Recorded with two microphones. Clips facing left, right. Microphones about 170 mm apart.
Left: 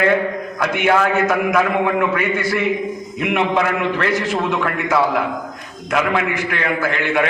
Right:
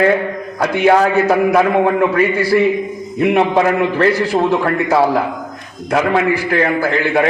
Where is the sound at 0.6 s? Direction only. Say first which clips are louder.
Right 5 dB; 35° right (ahead or behind).